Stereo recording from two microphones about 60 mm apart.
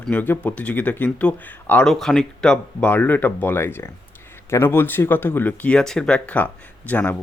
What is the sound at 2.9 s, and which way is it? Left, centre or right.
Speech, left.